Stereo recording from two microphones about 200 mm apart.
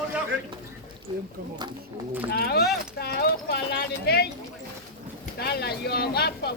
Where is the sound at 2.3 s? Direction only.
50° left (ahead or behind).